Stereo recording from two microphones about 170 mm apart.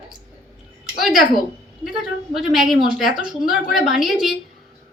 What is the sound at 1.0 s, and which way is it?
A woman's voice, centre (ahead or behind).